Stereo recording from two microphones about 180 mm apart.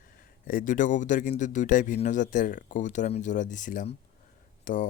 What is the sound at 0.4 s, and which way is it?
Speech, 50° left (ahead or behind).